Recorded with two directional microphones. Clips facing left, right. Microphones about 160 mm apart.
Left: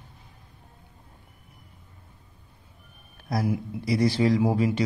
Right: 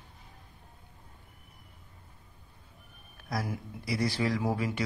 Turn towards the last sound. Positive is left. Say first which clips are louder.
# left 8 dB
turn(degrees=20)  # may be behind; listen again after turning